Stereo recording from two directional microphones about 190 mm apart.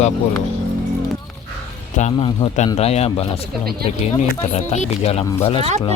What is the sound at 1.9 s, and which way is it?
Speech, 35° left (ahead or behind).